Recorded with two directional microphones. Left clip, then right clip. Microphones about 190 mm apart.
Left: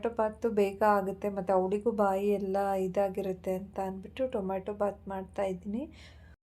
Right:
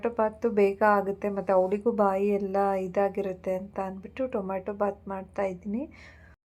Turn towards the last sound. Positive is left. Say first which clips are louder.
# right 3 dB
turn(degrees=-20)  # may be behind; listen again after turning